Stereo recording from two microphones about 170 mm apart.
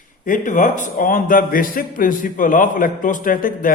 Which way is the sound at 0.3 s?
50° left (ahead or behind).